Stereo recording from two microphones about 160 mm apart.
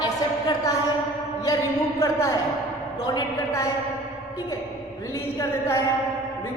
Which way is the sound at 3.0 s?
25° left (ahead or behind).